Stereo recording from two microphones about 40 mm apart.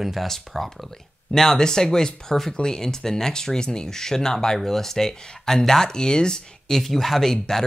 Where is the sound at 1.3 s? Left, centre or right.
Centre.